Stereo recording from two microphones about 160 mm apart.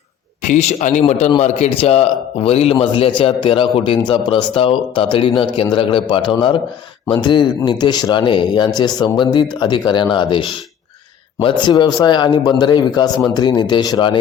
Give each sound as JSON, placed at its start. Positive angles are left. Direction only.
{"t": 0.4, "sound": "a man's voice", "side_deg": 45}